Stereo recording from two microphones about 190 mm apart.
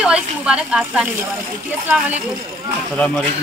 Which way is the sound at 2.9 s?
5° left (ahead or behind).